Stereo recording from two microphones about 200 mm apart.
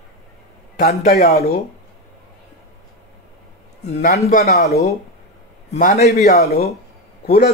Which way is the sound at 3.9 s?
35° left (ahead or behind).